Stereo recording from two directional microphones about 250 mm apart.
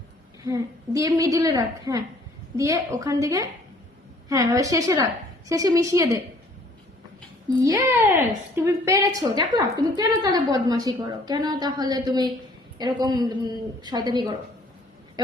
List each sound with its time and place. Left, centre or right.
0.4 s a woman's voice: centre
7.6 s a woman's voice: centre